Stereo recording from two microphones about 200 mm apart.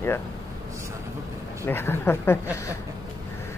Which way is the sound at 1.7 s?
10° left (ahead or behind).